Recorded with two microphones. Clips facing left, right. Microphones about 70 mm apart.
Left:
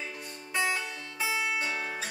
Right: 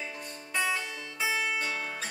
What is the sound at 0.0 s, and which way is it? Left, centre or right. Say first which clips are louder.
Music: even; centre.